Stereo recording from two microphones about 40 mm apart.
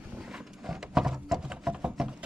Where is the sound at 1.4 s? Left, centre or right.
Centre.